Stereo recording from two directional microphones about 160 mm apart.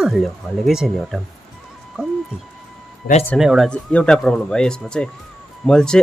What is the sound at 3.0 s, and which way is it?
Speech, 80° left.